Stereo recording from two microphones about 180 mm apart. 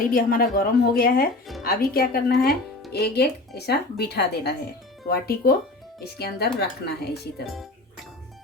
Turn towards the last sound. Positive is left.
turn(degrees=65)  # may be behind; listen again after turning